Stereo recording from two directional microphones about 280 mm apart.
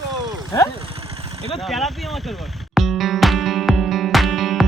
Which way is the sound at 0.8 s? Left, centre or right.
Right.